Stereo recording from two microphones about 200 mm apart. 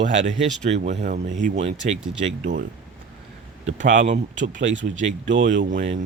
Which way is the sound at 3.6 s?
40° right (ahead or behind).